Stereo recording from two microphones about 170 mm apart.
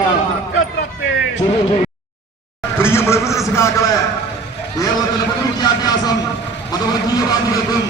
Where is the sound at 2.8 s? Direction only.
15° left (ahead or behind).